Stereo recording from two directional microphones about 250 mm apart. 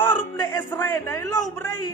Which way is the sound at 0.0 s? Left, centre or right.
Centre.